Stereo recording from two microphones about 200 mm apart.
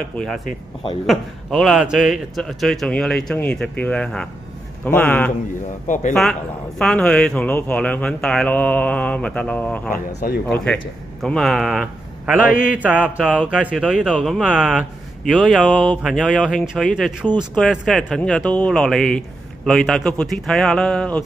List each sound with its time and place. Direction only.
0.1 s speech: 5° left (ahead or behind)
6.8 s speech: 5° left (ahead or behind)
9.9 s speech: 50° left (ahead or behind)
10.4 s speech: 5° left (ahead or behind)
12.6 s mantra: 5° right (ahead or behind)
13.5 s speech: 5° right (ahead or behind)